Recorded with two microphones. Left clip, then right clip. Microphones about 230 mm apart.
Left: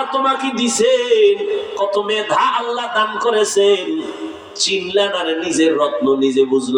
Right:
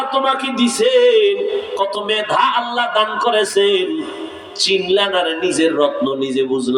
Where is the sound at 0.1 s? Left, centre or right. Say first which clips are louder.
Right 1 dB; right.